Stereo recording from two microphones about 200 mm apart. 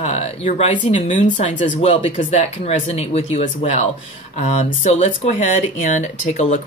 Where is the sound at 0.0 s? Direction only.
35° left (ahead or behind).